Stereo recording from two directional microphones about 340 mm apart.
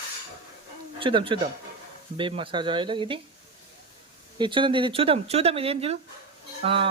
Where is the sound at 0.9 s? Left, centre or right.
Centre.